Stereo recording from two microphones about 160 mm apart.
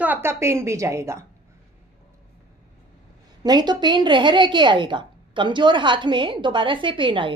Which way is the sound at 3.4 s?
25° right (ahead or behind).